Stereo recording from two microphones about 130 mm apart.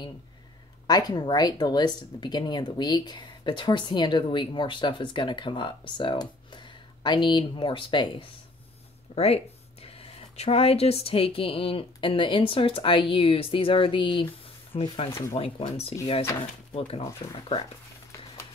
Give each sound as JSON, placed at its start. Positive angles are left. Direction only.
{"t": 0.8, "sound": "speech", "side_deg": 30}
{"t": 9.1, "sound": "speech", "side_deg": 50}
{"t": 15.0, "sound": "speech", "side_deg": 20}
{"t": 15.7, "sound": "speech", "side_deg": 50}